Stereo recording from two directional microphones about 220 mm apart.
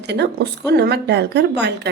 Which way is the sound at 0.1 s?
50° right (ahead or behind).